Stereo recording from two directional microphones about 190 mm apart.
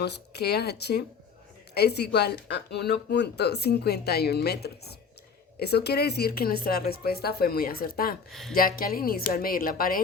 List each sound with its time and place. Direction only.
0.0 s a woman's voice: 60° left (ahead or behind)
8.3 s speech: centre (ahead or behind)
8.5 s a woman's voice: 50° left (ahead or behind)